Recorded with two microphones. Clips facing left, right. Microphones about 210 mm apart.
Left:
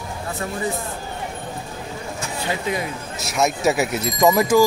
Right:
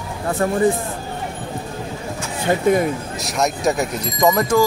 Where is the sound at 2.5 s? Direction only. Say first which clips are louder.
Right 10 dB; 50° right (ahead or behind).